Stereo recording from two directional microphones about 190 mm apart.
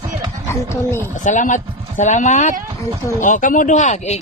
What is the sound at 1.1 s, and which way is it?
Speech, 40° left (ahead or behind).